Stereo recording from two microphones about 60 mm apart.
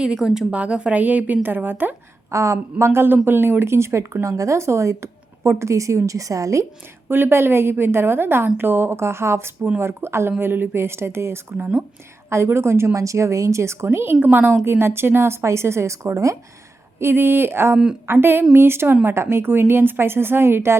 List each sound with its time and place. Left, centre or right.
0.0 s a woman's voice: centre
0.5 s a woman's voice: right
2.3 s a woman's voice: right
7.1 s a woman's voice: right
17.0 s a woman's voice: right